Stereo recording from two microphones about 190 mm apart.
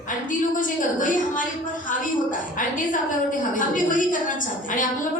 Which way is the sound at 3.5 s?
45° left (ahead or behind).